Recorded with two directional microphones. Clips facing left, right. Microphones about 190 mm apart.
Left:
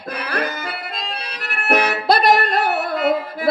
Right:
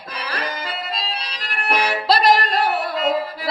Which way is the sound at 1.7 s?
55° left (ahead or behind).